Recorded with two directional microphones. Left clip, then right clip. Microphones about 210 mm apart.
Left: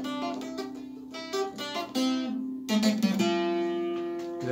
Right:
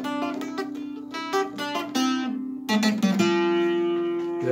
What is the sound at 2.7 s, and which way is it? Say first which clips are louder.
Music: right 4 dB; 45° right (ahead or behind).